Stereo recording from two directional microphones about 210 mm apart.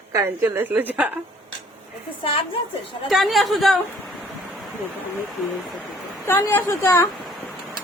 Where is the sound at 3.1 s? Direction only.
Centre (ahead or behind).